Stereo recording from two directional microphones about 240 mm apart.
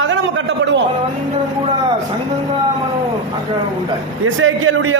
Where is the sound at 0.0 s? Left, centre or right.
Right.